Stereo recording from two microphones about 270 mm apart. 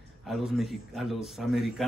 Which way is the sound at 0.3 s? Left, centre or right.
Centre.